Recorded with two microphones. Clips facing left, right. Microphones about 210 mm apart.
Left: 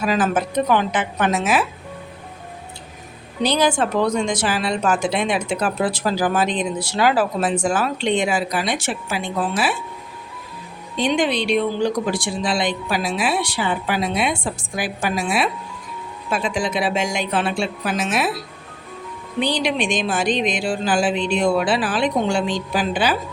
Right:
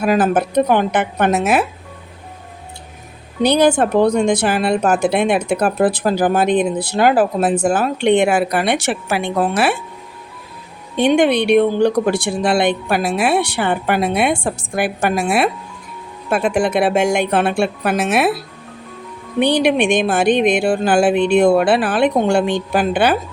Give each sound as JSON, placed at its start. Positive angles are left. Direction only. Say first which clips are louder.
{"t": 0.0, "sound": "speech", "louder": "right 5 dB", "side_deg": -55}
{"t": 3.4, "sound": "speech", "louder": "right 5 dB", "side_deg": -60}
{"t": 10.9, "sound": "speech", "louder": "right 6 dB", "side_deg": -60}
{"t": 19.4, "sound": "speech", "louder": "right 7 dB", "side_deg": -60}